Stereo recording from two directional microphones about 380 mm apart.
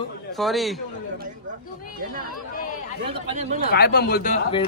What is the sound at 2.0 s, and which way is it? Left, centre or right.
Speech, right.